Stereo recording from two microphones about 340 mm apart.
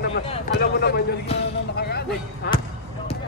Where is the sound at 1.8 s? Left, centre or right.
Left.